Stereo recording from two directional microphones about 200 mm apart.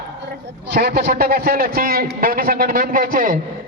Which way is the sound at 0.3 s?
55° right (ahead or behind).